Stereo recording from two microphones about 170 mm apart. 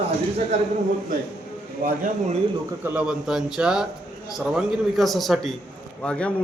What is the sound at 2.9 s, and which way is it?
A man's voice, 5° right (ahead or behind).